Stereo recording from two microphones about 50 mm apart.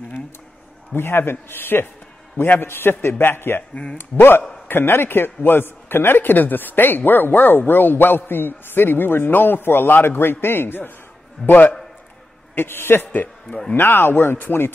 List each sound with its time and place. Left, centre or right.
0.9 s a man's voice: left
12.5 s a man's voice: left